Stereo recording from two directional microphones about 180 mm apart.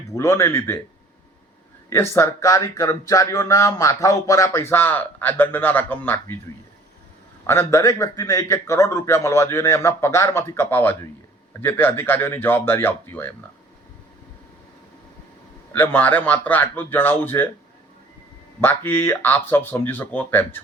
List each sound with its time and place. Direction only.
0.1 s speech: 15° left (ahead or behind)
1.9 s speech: 15° left (ahead or behind)
7.4 s speech: 15° left (ahead or behind)
15.7 s speech: 10° left (ahead or behind)
18.6 s speech: 10° left (ahead or behind)